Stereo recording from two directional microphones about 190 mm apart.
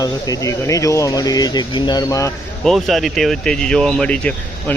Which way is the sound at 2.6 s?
Centre (ahead or behind).